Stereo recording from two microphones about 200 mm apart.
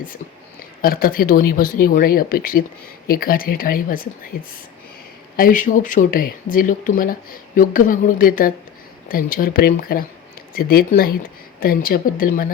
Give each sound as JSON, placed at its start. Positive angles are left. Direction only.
{"t": 0.8, "sound": "speech", "side_deg": 45}
{"t": 5.4, "sound": "speech", "side_deg": 40}